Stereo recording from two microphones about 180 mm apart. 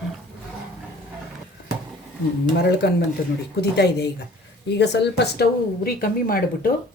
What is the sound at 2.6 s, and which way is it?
A woman's voice, 65° left (ahead or behind).